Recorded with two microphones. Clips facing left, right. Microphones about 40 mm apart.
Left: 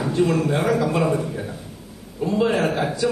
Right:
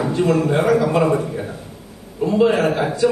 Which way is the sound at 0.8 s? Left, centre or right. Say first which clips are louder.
Right 4 dB; centre.